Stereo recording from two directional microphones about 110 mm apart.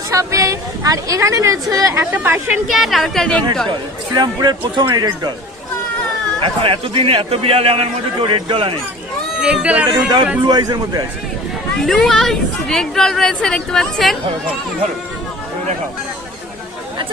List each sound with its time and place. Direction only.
0.1 s speech: 30° right (ahead or behind)
2.1 s a woman's voice: 15° right (ahead or behind)
2.6 s speech: centre (ahead or behind)
3.7 s speech: 40° right (ahead or behind)
4.9 s speech: 35° right (ahead or behind)
6.4 s a man's voice: 55° right (ahead or behind)
9.4 s a woman's voice: 10° right (ahead or behind)
10.4 s speech: 40° right (ahead or behind)
11.8 s speech: 5° left (ahead or behind)